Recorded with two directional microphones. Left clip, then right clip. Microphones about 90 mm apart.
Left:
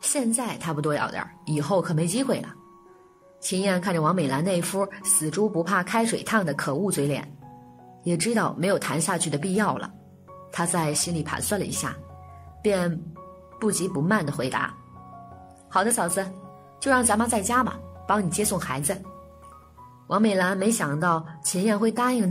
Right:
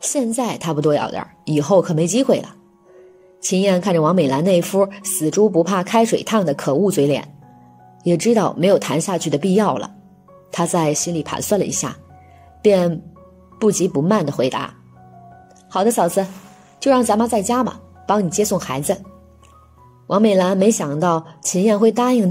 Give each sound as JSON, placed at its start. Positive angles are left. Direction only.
{"t": 0.0, "sound": "a woman's voice", "side_deg": -35}
{"t": 15.7, "sound": "a woman's voice", "side_deg": -30}
{"t": 20.1, "sound": "a woman's voice", "side_deg": -30}